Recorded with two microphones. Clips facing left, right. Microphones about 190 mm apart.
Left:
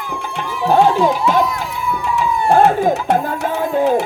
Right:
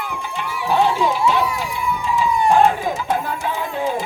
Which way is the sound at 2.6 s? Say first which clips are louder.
Left 4 dB; 60° left (ahead or behind).